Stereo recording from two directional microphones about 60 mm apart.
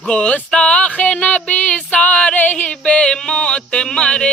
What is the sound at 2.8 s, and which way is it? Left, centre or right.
Music, centre.